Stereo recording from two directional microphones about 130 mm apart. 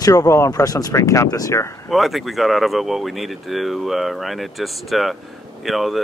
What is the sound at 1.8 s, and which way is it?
Speech, centre (ahead or behind).